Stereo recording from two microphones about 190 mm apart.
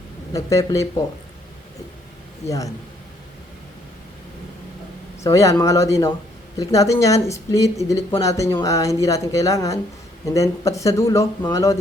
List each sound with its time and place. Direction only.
0.3 s speech: 15° left (ahead or behind)
5.2 s speech: 15° left (ahead or behind)